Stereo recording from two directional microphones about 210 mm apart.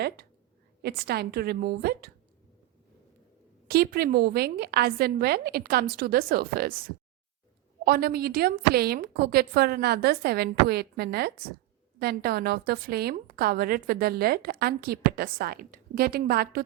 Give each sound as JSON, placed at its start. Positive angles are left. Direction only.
{"t": 0.8, "sound": "a woman's voice", "side_deg": -50}
{"t": 3.7, "sound": "a woman's voice", "side_deg": -45}